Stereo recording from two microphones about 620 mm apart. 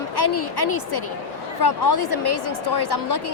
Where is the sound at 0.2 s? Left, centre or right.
Left.